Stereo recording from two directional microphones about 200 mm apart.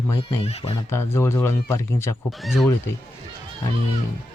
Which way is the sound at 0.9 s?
15° left (ahead or behind).